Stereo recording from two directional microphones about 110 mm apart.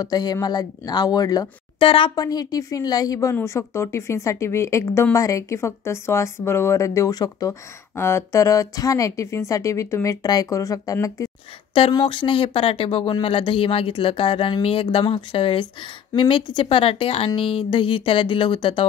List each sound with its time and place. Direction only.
0.0 s speech: 35° left (ahead or behind)
1.8 s speech: 55° left (ahead or behind)
2.1 s speech: 35° left (ahead or behind)
7.9 s speech: 25° left (ahead or behind)
12.0 s speech: 50° left (ahead or behind)